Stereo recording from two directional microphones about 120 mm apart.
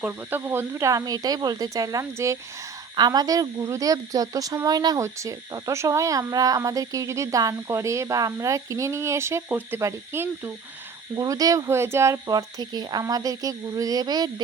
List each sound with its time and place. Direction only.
0.0 s speech: 15° right (ahead or behind)
2.9 s speech: 35° right (ahead or behind)